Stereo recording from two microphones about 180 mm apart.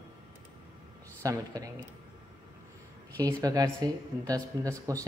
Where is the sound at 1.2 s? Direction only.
20° right (ahead or behind).